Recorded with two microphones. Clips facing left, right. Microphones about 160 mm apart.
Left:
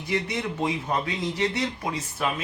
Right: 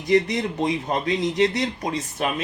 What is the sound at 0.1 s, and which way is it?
Speech, 40° right (ahead or behind).